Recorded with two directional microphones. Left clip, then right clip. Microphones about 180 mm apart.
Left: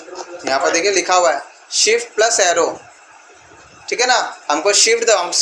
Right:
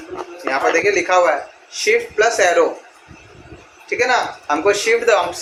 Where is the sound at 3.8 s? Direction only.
45° left (ahead or behind).